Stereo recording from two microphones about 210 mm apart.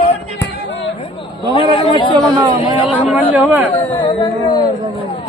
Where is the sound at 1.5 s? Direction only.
25° left (ahead or behind).